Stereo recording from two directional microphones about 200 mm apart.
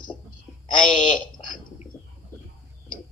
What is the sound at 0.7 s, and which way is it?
Speech, 5° left (ahead or behind).